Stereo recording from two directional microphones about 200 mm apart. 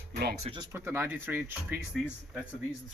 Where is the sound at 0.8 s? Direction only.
10° right (ahead or behind).